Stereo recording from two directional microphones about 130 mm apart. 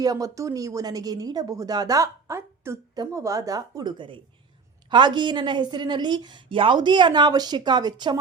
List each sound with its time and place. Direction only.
0.0 s a woman's voice: 25° right (ahead or behind)